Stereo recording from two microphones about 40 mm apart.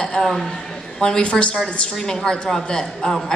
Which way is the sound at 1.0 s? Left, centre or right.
Left.